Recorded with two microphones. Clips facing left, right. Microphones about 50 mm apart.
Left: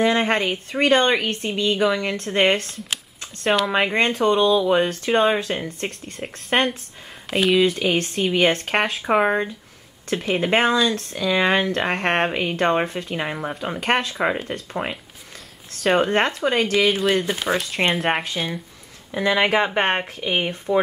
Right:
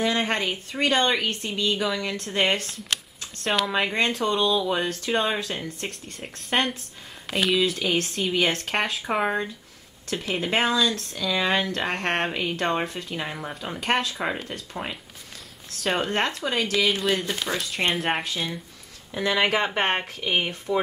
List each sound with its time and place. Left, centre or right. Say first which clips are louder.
0.0 s speech: left 5 dB; left
3.4 s speech: left 5 dB; centre
3.9 s speech: left 5 dB; left
5.9 s speech: left 5 dB; centre
7.6 s speech: left 4 dB; centre
8.4 s speech: left 5 dB; left
8.7 s speech: left 4 dB; centre
9.0 s speech: left 6 dB; centre
15.8 s speech: left 6 dB; centre
16.7 s speech: left 2 dB; centre
18.3 s speech: left 3 dB; left